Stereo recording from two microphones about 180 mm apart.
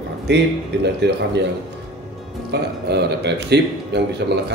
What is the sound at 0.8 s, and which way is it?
Speech, 70° right (ahead or behind).